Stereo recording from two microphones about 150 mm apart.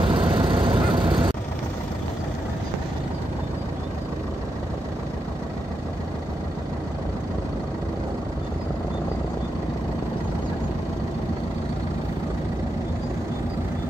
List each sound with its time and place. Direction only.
0.0 s vehicle: 30° right (ahead or behind)